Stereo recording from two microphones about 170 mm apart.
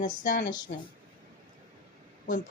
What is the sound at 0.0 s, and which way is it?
Speech, 50° left (ahead or behind).